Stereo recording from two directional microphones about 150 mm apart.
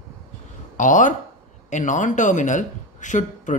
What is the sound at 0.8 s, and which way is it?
Speech, 55° left (ahead or behind).